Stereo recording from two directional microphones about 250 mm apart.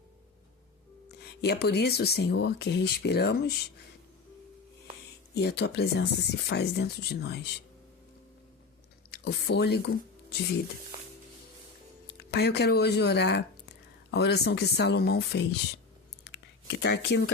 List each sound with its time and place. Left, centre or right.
1.0 s speech: left
5.3 s speech: left
9.0 s speech: left
12.3 s speech: left
16.6 s speech: left